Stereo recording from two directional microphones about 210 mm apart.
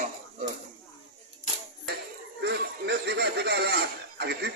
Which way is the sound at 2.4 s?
50° right (ahead or behind).